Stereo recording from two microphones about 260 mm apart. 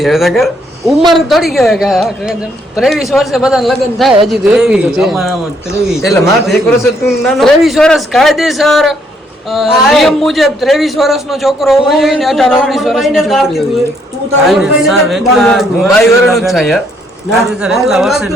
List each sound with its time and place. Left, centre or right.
0.0 s a man's voice: centre